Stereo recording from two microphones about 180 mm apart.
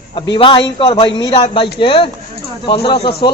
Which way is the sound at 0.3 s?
30° left (ahead or behind).